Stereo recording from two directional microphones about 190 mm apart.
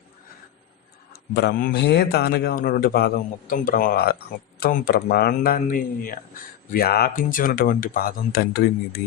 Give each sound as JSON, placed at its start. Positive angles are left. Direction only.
{"t": 1.4, "sound": "a man's voice", "side_deg": 55}